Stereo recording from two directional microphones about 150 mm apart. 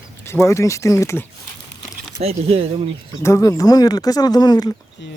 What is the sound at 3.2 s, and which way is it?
Speech, 20° left (ahead or behind).